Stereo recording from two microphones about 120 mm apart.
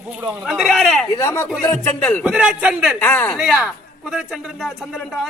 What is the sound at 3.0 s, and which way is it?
Speech, 15° left (ahead or behind).